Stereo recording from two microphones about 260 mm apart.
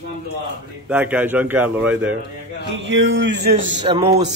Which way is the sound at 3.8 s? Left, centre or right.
Right.